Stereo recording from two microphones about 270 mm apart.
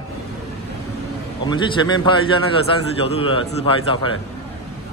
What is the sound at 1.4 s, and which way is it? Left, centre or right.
A man's voice, centre.